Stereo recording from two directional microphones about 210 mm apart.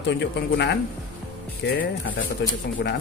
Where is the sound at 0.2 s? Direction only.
55° left (ahead or behind).